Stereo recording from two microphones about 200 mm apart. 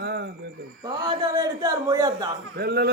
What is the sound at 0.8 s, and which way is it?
A man's voice, 20° right (ahead or behind).